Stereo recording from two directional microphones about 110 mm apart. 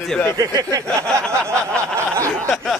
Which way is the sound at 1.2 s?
10° left (ahead or behind).